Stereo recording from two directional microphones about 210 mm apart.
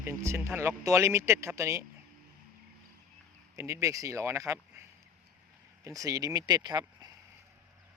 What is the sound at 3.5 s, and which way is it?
Speech, 15° right (ahead or behind).